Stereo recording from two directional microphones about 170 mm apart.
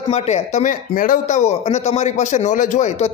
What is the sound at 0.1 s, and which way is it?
Speech, 40° left (ahead or behind).